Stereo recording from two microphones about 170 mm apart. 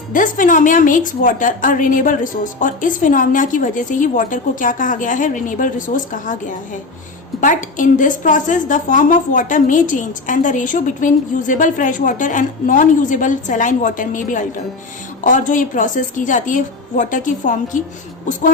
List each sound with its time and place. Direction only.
0.1 s a woman's voice: 50° left (ahead or behind)
7.4 s a woman's voice: 50° left (ahead or behind)